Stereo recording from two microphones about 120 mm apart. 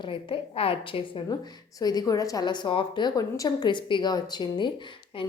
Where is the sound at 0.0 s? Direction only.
45° left (ahead or behind).